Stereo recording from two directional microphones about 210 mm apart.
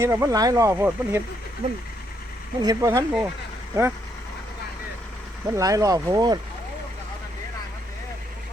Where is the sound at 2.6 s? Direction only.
15° right (ahead or behind).